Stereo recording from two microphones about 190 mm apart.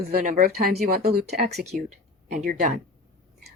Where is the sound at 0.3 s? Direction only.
45° right (ahead or behind).